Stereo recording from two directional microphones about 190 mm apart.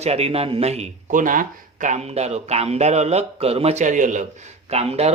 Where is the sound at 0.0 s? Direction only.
35° right (ahead or behind).